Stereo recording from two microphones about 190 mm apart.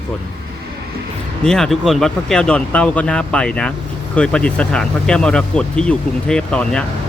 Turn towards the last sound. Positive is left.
turn(degrees=5)  # may be behind; listen again after turning